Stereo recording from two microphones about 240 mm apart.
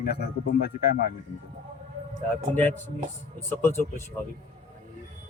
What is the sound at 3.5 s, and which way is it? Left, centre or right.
Speech, centre.